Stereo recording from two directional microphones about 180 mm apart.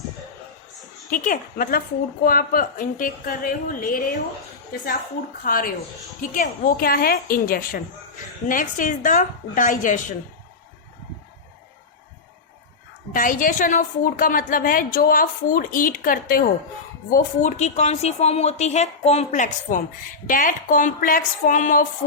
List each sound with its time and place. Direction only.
1.1 s a woman's voice: 50° left (ahead or behind)
5.4 s a woman's voice: 50° left (ahead or behind)
13.1 s a woman's voice: 50° left (ahead or behind)